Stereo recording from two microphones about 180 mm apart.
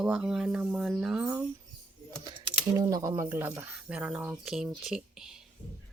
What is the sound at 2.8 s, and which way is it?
Speech, 20° right (ahead or behind).